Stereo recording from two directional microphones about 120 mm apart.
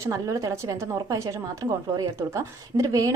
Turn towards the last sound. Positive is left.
turn(degrees=-25)  # may be behind; listen again after turning